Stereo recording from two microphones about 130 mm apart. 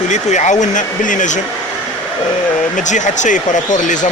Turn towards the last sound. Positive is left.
turn(degrees=75)  # may be behind; listen again after turning